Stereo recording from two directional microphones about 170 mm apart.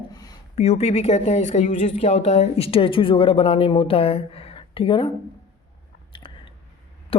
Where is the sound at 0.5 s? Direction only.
40° left (ahead or behind).